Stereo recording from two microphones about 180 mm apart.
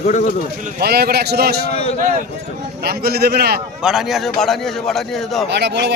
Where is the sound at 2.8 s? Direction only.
60° right (ahead or behind).